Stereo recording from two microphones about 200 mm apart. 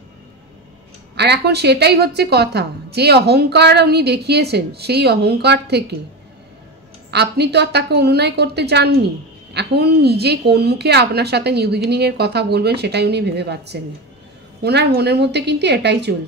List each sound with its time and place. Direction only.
1.1 s a woman's voice: 55° right (ahead or behind)
7.1 s a woman's voice: 55° right (ahead or behind)